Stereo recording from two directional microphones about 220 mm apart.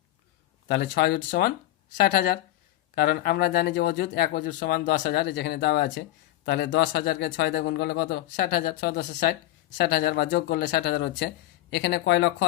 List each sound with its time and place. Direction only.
0.7 s speech: 50° left (ahead or behind)